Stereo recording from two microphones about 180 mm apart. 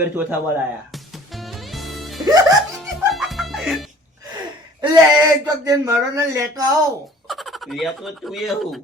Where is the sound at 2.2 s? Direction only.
20° right (ahead or behind).